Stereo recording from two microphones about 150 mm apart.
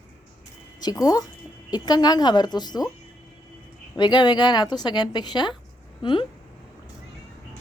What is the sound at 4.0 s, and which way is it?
A woman's voice, 30° left (ahead or behind).